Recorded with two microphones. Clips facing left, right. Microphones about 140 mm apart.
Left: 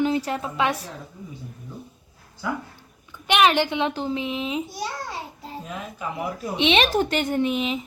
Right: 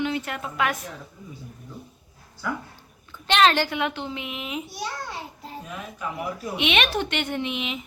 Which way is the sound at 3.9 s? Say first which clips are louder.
Left 6 dB; 35° left (ahead or behind).